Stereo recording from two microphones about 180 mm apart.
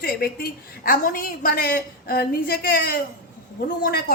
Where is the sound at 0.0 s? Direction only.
55° left (ahead or behind).